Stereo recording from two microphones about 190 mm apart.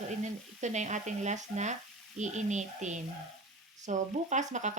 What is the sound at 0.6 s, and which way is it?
A woman's voice, 40° right (ahead or behind).